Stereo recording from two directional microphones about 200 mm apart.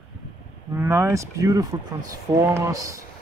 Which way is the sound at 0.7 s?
10° right (ahead or behind).